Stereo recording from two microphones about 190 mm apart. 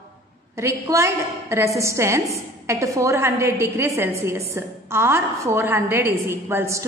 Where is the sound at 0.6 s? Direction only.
15° right (ahead or behind).